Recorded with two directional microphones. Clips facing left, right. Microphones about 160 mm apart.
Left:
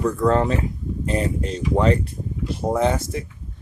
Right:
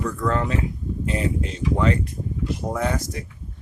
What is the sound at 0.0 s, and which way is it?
Speech, 35° left (ahead or behind).